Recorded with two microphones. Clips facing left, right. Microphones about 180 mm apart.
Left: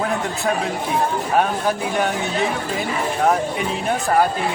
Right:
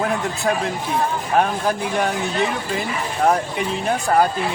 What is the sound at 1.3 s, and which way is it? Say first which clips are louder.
Speech: right 1 dB; centre (ahead or behind).